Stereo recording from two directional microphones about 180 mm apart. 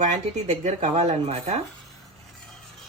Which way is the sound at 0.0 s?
40° right (ahead or behind).